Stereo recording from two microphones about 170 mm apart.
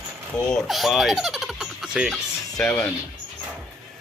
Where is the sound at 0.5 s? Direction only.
Centre (ahead or behind).